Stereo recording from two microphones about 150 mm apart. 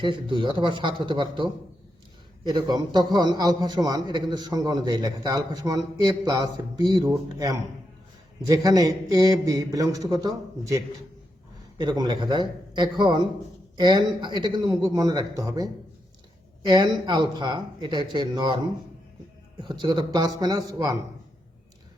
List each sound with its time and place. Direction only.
0.0 s a man's voice: 35° right (ahead or behind)
19.6 s a man's voice: 30° right (ahead or behind)